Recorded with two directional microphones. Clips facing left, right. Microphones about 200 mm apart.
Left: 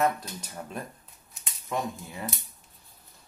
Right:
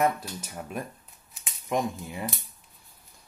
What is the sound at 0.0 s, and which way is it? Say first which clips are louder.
Speech: right 1 dB; 10° right (ahead or behind).